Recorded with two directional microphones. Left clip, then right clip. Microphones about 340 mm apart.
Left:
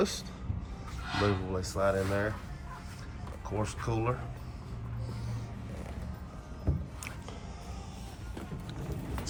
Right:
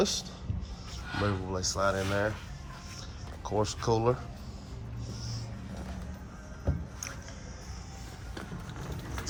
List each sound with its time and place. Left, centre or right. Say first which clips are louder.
0.0 s speech: right 2 dB; centre
3.4 s speech: right 6 dB; centre